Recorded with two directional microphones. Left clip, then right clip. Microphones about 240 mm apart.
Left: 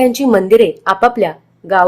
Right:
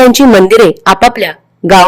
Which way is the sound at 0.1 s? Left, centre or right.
Right.